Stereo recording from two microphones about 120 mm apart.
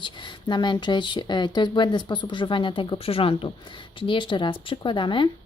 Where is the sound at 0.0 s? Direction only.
40° left (ahead or behind).